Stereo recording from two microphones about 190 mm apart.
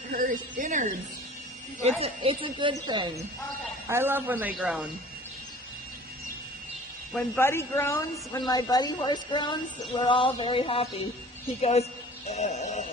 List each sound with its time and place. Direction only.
0.1 s a woman's voice: 45° right (ahead or behind)
2.0 s speech: 30° right (ahead or behind)
3.8 s speech: 10° right (ahead or behind)
7.1 s a woman's voice: 10° left (ahead or behind); by 10.8 s 30° left (ahead or behind)
11.6 s music: 35° left (ahead or behind)